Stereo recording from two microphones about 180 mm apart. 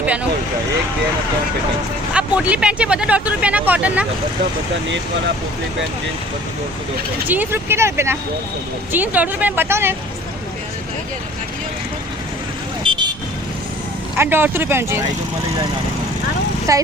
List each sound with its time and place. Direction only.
2.1 s speech: 5° right (ahead or behind)
7.3 s speech: 10° right (ahead or behind)
12.9 s vehicle: 30° right (ahead or behind)
14.2 s speech: 10° right (ahead or behind)
16.7 s speech: 20° right (ahead or behind)